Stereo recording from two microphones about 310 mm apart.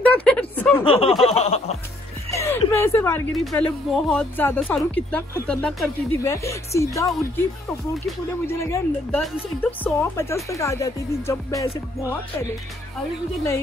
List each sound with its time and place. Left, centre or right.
0.0 s a sound: centre
0.8 s speech: centre
1.2 s chuckle: centre
2.3 s speech: centre
8.5 s speech: centre